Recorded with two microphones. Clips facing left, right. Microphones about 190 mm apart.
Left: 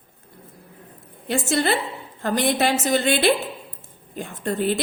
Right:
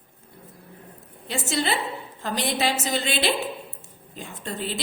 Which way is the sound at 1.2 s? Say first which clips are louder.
Left 5 dB; 55° left (ahead or behind).